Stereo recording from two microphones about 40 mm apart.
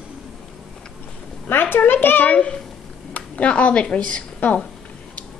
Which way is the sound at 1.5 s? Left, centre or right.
Left.